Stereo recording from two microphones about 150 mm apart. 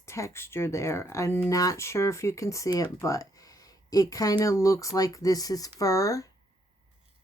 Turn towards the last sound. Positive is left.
turn(degrees=20)  # may be behind; listen again after turning